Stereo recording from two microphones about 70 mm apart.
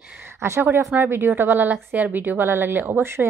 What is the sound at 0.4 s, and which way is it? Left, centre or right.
Speech, right.